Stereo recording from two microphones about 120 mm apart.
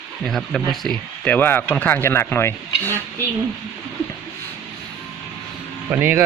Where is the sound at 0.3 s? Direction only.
Centre (ahead or behind); by 3.0 s 20° left (ahead or behind).